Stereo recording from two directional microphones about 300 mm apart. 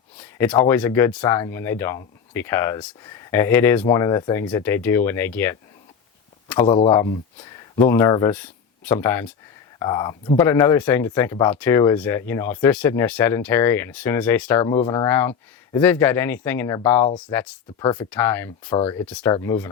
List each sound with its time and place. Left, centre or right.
0.2 s speech: centre
18.8 s speech: centre
19.0 s speech: centre